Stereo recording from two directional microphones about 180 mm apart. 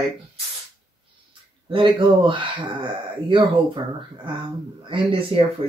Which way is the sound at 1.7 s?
25° right (ahead or behind).